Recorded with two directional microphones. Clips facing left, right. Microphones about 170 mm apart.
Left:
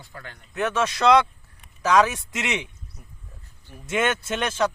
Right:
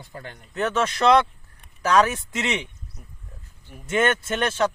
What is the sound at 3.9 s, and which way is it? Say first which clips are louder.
Speech: right 2 dB; 10° left (ahead or behind).